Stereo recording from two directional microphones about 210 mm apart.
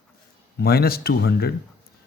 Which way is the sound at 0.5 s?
45° left (ahead or behind).